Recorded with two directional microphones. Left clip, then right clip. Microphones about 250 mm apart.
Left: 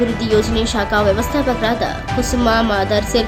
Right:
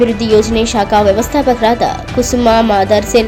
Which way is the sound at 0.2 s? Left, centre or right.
Centre.